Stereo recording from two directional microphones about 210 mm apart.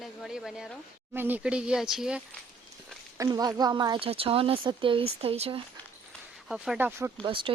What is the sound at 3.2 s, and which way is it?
Speech, 20° right (ahead or behind).